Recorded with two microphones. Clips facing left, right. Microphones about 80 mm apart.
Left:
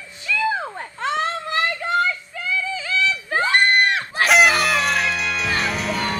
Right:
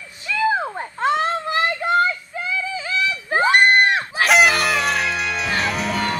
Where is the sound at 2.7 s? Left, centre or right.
Centre.